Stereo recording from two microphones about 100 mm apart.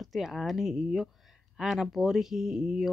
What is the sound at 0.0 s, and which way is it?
Speech, centre (ahead or behind).